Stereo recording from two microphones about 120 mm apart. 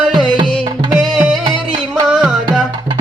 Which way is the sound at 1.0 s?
5° right (ahead or behind).